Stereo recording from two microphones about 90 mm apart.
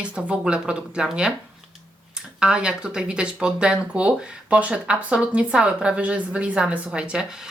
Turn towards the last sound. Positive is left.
turn(degrees=-10)  # may be behind; listen again after turning